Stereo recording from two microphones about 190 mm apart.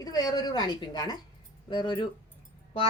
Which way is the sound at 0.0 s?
20° left (ahead or behind).